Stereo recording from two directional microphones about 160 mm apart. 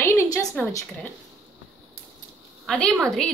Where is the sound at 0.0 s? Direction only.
20° left (ahead or behind).